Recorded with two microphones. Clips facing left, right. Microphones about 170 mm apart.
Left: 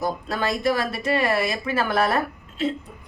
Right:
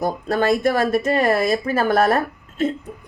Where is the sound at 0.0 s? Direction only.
50° right (ahead or behind).